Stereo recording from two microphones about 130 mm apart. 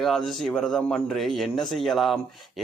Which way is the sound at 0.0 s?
Centre (ahead or behind).